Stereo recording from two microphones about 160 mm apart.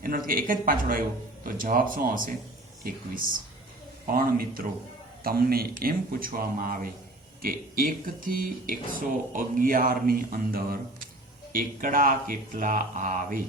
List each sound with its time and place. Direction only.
0.0 s speech: 60° right (ahead or behind)
4.0 s speech: 65° right (ahead or behind)